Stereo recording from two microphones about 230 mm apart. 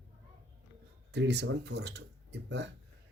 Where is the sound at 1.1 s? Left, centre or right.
Right.